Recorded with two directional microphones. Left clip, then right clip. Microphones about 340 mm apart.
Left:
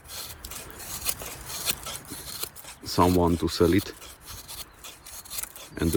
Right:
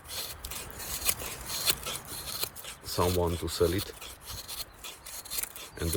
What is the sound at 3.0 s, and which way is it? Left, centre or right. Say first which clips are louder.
Speech: left 6 dB; left.